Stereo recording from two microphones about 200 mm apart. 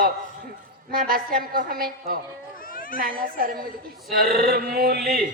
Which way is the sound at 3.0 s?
45° right (ahead or behind).